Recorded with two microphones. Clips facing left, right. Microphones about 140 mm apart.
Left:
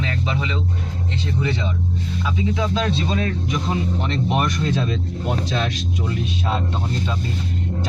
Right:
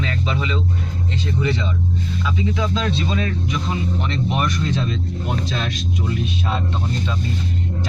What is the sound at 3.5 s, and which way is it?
Speech, 40° left (ahead or behind).